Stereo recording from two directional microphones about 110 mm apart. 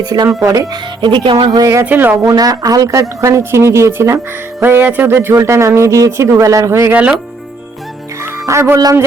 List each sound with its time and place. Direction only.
0.0 s a man's voice: 40° right (ahead or behind)
1.0 s speech: 45° right (ahead or behind)
1.8 s speech: 15° right (ahead or behind)
2.2 s a man's voice: 35° right (ahead or behind)
6.9 s speech: 10° right (ahead or behind)
8.2 s speech: 25° right (ahead or behind)